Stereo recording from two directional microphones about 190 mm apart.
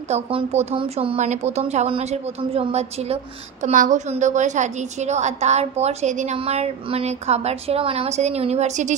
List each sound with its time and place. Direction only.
0.1 s a woman's voice: 30° right (ahead or behind)